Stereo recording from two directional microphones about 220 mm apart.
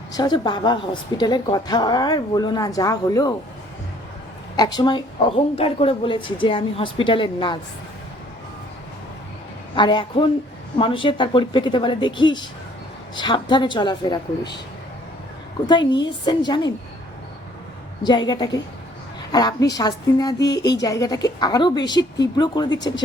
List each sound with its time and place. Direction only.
0.1 s a woman's voice: 20° left (ahead or behind)
4.5 s a woman's voice: 20° left (ahead or behind)
9.7 s a woman's voice: 20° left (ahead or behind)
15.6 s a woman's voice: 20° left (ahead or behind)
18.0 s a woman's voice: 20° left (ahead or behind)